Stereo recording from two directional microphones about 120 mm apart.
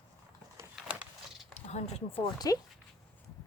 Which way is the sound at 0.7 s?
10° right (ahead or behind).